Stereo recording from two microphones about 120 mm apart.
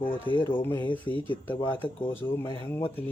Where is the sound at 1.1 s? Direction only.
45° right (ahead or behind).